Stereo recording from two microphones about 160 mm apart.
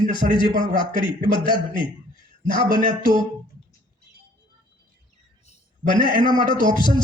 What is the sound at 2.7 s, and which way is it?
Speech, 30° left (ahead or behind).